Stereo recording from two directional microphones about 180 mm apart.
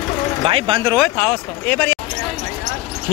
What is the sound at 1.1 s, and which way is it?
Speech, 10° left (ahead or behind).